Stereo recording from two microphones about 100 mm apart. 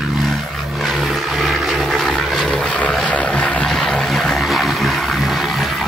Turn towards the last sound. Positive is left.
turn(degrees=0)  # may be behind; listen again after turning